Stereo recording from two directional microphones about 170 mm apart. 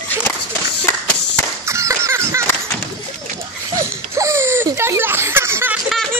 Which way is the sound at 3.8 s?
15° right (ahead or behind).